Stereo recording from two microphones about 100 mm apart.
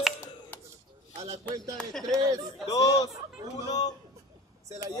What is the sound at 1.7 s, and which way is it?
Speech, 5° left (ahead or behind).